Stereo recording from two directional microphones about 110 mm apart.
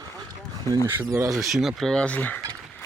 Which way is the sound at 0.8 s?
25° right (ahead or behind).